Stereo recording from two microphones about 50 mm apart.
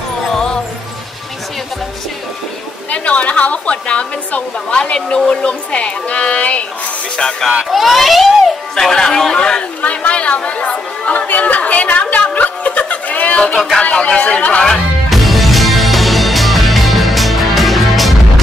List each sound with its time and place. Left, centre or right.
0.2 s music: centre
2.9 s a woman's voice: left
7.7 s speech: centre
8.7 s a man's voice: centre
9.8 s chatter: left
13.8 s speech: left
15.0 s music: centre